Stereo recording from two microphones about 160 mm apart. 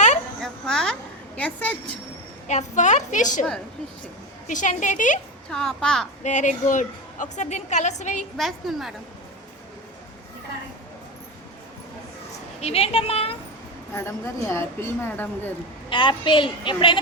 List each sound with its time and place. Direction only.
0.4 s a sound: 5° left (ahead or behind)
1.4 s a woman's voice: 10° left (ahead or behind)
2.5 s a woman's voice: 45° left (ahead or behind)
4.4 s a woman's voice: 50° left (ahead or behind)
5.5 s a child's voice: 5° left (ahead or behind)
6.2 s a woman's voice: 50° left (ahead or behind)
8.4 s a child's voice: centre (ahead or behind)
12.5 s a woman's voice: 40° left (ahead or behind)
13.9 s a woman's voice: 15° left (ahead or behind)
15.9 s a woman's voice: 30° left (ahead or behind)